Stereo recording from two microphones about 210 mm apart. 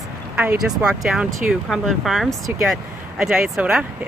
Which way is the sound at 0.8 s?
5° right (ahead or behind).